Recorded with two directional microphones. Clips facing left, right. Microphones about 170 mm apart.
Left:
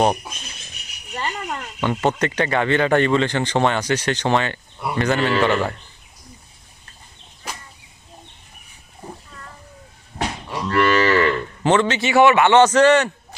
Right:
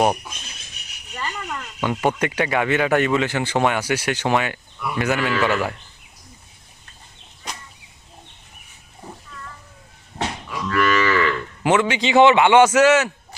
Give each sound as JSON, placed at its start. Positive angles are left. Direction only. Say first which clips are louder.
{"t": 1.1, "sound": "a sound", "louder": "left 3 dB", "side_deg": 30}
{"t": 1.8, "sound": "a man's voice", "louder": "left 1 dB", "side_deg": -10}
{"t": 10.1, "sound": "cattle", "louder": "left 1 dB", "side_deg": -5}
{"t": 10.5, "sound": "cattle", "louder": "left 2 dB", "side_deg": 35}
{"t": 11.6, "sound": "a man's voice", "louder": "left 1 dB", "side_deg": -10}